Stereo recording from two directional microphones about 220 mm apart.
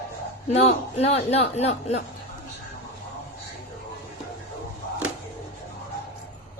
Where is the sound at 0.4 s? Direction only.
30° left (ahead or behind).